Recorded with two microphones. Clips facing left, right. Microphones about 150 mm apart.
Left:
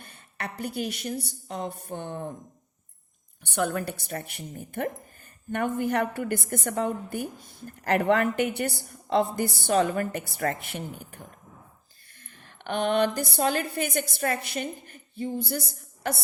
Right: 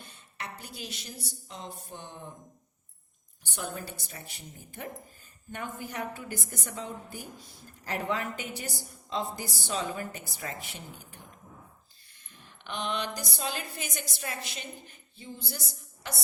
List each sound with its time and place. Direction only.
0.0 s a woman's voice: 55° left (ahead or behind)
3.4 s a woman's voice: 65° left (ahead or behind)